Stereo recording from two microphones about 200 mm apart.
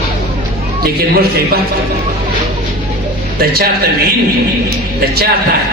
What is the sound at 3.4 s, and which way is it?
Speech, 50° right (ahead or behind).